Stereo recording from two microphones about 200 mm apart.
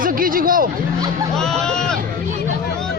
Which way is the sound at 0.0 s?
45° right (ahead or behind).